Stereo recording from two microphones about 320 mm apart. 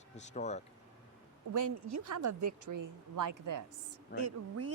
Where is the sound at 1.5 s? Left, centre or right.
Right.